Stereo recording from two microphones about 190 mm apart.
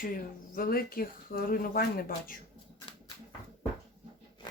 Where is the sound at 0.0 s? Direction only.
50° left (ahead or behind).